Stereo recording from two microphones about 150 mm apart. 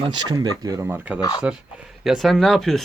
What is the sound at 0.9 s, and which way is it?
Speech, 10° right (ahead or behind).